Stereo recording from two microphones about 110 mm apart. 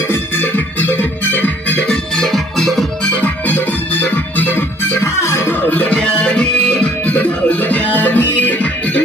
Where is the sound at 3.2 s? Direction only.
15° left (ahead or behind).